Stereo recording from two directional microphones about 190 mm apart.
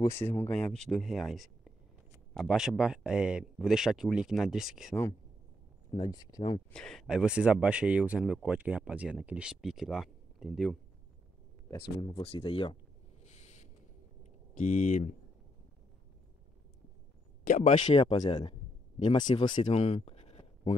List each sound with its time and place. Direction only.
0.2 s speech: 10° left (ahead or behind)
5.9 s speech: 20° left (ahead or behind)
6.7 s speech: 5° left (ahead or behind)
12.0 s speech: 30° left (ahead or behind)
14.6 s speech: 40° left (ahead or behind)
17.5 s speech: 40° left (ahead or behind); by 19.6 s 25° left (ahead or behind)
19.6 s a sound: 35° left (ahead or behind)